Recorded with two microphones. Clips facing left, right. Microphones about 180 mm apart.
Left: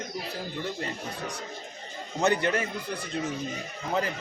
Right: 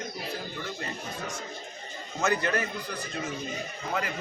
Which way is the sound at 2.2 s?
25° left (ahead or behind).